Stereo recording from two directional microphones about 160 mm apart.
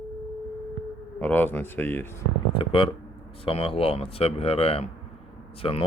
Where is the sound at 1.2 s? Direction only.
10° left (ahead or behind).